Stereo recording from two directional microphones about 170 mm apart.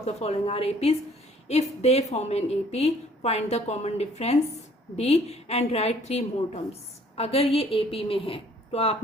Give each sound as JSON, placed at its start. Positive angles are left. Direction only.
{"t": 0.0, "sound": "a woman's voice", "side_deg": 40}